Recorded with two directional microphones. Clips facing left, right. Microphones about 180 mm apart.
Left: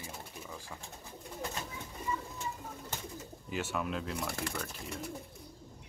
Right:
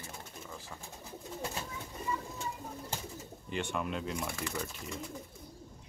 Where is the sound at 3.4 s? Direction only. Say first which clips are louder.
Even; 5° left (ahead or behind).